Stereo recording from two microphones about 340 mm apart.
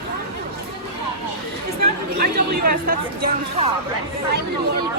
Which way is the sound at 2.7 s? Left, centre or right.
Right.